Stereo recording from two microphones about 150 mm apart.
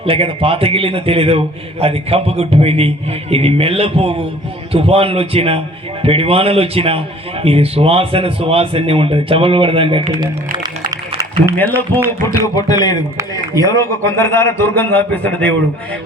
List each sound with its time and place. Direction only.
0.0 s a man's voice: 40° right (ahead or behind)
10.9 s a sound: 20° right (ahead or behind)
11.7 s speech: 15° right (ahead or behind)
12.4 s a man's voice: 25° left (ahead or behind)